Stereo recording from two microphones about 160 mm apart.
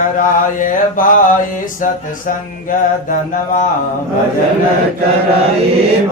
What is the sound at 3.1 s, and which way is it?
Mantra, 55° left (ahead or behind).